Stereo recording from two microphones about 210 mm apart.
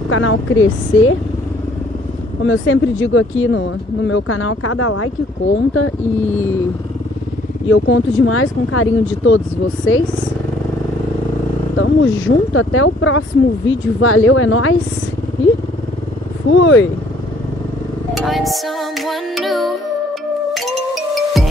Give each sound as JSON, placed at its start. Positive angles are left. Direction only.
{"t": 0.1, "sound": "speech", "side_deg": 75}
{"t": 2.4, "sound": "speech", "side_deg": 70}
{"t": 5.5, "sound": "speech", "side_deg": 70}
{"t": 7.6, "sound": "speech", "side_deg": 65}
{"t": 11.8, "sound": "speech", "side_deg": 70}
{"t": 16.5, "sound": "vehicle", "side_deg": 65}
{"t": 18.1, "sound": "music", "side_deg": 0}
{"t": 21.1, "sound": "music", "side_deg": 0}